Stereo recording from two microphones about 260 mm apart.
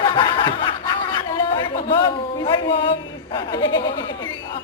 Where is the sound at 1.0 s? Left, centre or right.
Centre.